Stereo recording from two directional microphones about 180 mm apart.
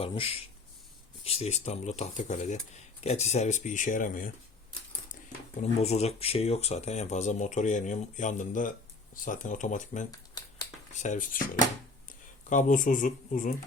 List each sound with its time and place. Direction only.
0.0 s speech: 30° left (ahead or behind); by 4.3 s 50° left (ahead or behind)
5.5 s speech: 40° left (ahead or behind)